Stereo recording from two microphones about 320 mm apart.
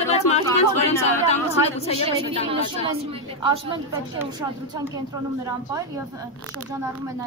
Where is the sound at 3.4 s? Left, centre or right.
Centre.